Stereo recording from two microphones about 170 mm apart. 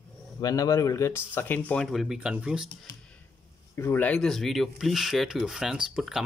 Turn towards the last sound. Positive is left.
turn(degrees=-5)  # may be behind; listen again after turning